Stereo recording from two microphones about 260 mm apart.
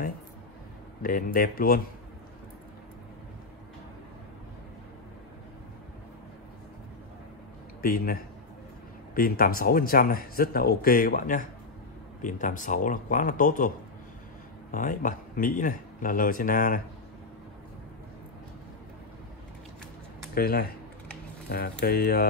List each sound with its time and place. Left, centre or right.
1.0 s speech: left
7.8 s speech: left
20.3 s speech: left